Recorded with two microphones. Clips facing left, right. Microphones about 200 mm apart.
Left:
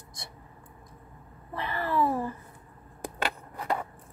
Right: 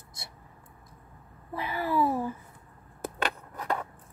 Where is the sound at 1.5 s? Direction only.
5° right (ahead or behind).